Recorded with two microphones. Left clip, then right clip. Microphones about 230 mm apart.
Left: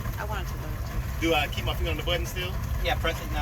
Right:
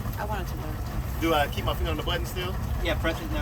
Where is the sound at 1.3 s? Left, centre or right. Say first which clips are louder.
Right 1 dB; centre.